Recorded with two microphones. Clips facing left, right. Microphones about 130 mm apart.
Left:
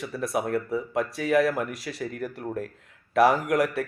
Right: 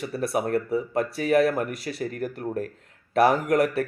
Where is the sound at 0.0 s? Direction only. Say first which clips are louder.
Right 2 dB; 55° right (ahead or behind).